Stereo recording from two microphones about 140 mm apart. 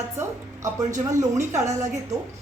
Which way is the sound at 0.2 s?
20° right (ahead or behind).